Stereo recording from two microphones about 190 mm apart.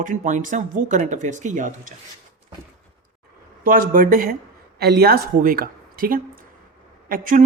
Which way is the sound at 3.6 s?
45° right (ahead or behind).